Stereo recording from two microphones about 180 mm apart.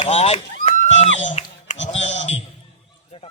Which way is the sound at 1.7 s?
90° left.